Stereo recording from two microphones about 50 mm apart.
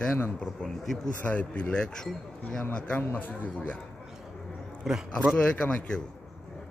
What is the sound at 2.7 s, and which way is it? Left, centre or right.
Speech, left.